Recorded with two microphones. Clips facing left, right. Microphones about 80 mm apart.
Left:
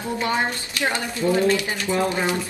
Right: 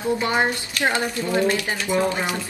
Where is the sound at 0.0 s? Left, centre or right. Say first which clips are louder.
Right 2 dB; right.